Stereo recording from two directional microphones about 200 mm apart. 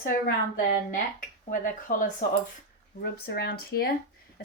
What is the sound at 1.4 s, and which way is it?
Speech, 40° left (ahead or behind).